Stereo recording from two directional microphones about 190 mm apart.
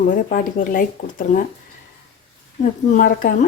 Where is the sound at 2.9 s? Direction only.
45° left (ahead or behind).